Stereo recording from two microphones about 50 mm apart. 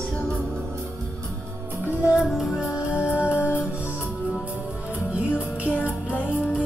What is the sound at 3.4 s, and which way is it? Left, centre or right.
Music, left.